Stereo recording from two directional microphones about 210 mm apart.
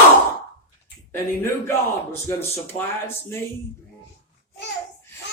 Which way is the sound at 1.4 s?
15° left (ahead or behind).